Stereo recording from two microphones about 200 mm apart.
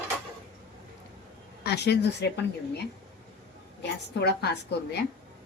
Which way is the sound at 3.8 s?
55° left (ahead or behind).